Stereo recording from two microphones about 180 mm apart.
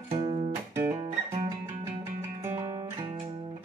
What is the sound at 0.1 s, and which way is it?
Music, 35° right (ahead or behind).